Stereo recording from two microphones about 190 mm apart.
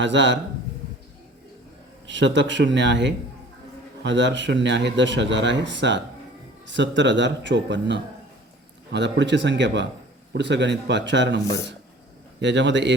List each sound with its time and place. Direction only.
0.0 s speech: 70° right (ahead or behind)
2.0 s speech: 70° right (ahead or behind)
12.4 s speech: 70° right (ahead or behind)